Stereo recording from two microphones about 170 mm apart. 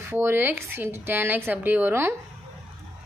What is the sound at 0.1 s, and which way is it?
A woman's voice, 15° right (ahead or behind).